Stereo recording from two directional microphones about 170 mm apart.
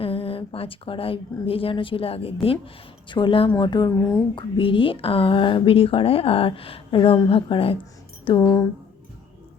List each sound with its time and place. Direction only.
0.0 s a woman's voice: 35° left (ahead or behind)
4.5 s speech: 30° left (ahead or behind)